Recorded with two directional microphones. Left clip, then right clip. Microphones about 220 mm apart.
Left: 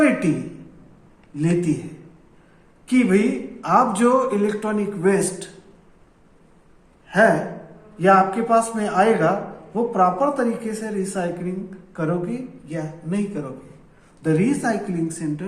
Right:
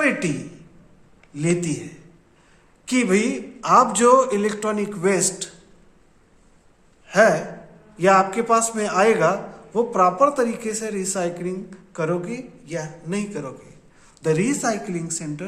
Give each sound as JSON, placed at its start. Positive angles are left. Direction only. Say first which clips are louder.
{"t": 1.4, "sound": "a man's voice", "louder": "left 1 dB", "side_deg": -45}
{"t": 2.8, "sound": "a man's voice", "louder": "left 1 dB", "side_deg": -50}
{"t": 7.1, "sound": "a man's voice", "louder": "even", "side_deg": -45}